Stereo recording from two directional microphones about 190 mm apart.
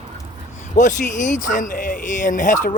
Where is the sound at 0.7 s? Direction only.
40° left (ahead or behind).